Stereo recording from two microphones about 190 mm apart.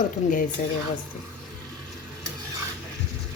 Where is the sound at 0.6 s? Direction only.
45° left (ahead or behind).